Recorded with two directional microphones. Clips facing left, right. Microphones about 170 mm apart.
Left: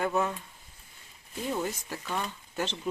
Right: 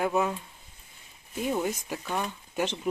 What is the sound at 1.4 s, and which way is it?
Speech, 15° right (ahead or behind).